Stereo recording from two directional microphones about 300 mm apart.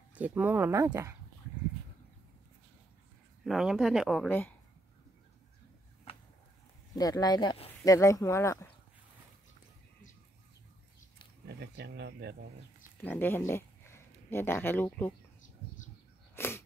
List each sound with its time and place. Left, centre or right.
0.1 s speech: centre
3.4 s speech: centre
6.1 s a sound: centre
6.9 s speech: centre
11.4 s speech: right
13.0 s speech: centre
16.3 s a sound: centre